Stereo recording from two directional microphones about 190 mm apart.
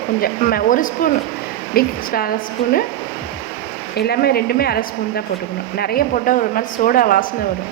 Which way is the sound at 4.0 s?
55° left (ahead or behind).